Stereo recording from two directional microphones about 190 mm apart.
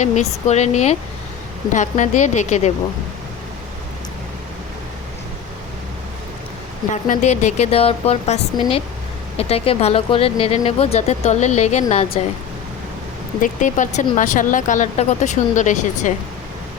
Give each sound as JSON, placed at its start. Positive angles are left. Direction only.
{"t": 0.0, "sound": "speech", "side_deg": 35}
{"t": 6.9, "sound": "speech", "side_deg": 40}
{"t": 13.4, "sound": "speech", "side_deg": 40}